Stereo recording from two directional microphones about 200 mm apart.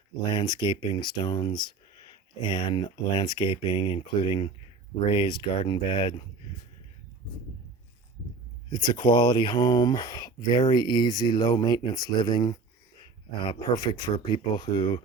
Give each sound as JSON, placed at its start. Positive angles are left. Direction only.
{"t": 0.3, "sound": "speech", "side_deg": 25}
{"t": 8.7, "sound": "speech", "side_deg": 20}